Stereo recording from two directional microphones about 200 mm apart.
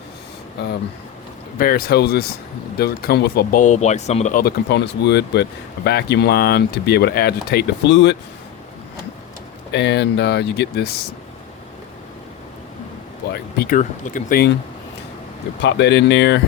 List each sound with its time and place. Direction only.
1.5 s speech: 50° left (ahead or behind)
4.4 s speech: 60° left (ahead or behind)
9.7 s speech: 60° left (ahead or behind)
13.3 s speech: 50° left (ahead or behind)
15.6 s speech: 60° left (ahead or behind)